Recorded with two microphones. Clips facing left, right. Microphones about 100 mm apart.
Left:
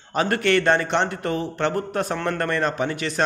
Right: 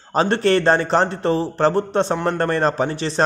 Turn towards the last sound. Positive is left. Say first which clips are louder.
# right 3 dB
turn(degrees=-30)  # may be behind; listen again after turning